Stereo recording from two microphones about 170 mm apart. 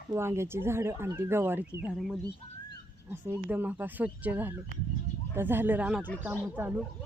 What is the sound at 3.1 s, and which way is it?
Speech, 10° right (ahead or behind).